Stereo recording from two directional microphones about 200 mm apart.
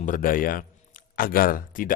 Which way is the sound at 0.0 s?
40° left (ahead or behind).